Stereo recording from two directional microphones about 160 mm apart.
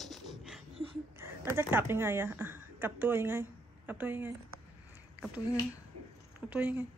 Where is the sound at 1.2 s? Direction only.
15° right (ahead or behind).